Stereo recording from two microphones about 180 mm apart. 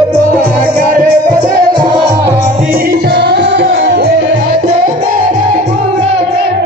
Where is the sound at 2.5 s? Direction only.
50° right (ahead or behind).